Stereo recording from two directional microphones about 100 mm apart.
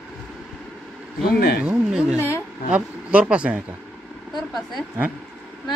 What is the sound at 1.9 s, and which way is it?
Speech, 10° right (ahead or behind).